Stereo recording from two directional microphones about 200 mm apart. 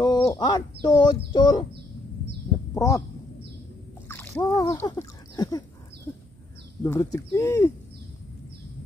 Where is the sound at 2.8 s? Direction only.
15° left (ahead or behind).